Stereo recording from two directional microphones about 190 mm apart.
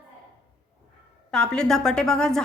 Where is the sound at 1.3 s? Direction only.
5° left (ahead or behind).